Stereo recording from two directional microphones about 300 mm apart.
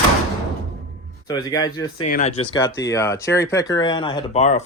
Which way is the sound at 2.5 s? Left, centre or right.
Centre.